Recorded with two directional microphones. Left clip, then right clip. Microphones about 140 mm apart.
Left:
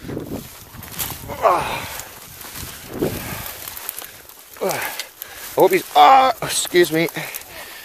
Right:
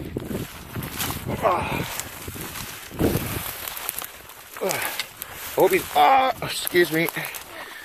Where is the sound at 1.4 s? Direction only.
85° left.